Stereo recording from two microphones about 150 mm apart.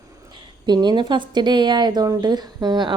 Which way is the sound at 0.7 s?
30° right (ahead or behind).